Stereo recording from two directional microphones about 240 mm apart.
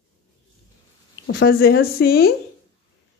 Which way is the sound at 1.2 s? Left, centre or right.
Left.